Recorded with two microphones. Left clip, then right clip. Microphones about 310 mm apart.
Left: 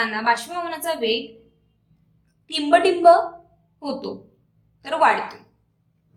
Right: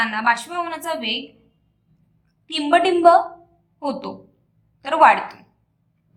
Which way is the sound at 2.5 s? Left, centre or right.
Centre.